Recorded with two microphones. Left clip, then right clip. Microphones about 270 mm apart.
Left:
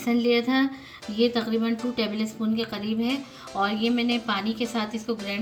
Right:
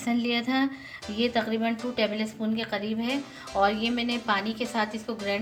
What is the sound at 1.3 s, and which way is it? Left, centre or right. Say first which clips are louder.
A woman's voice: even; right.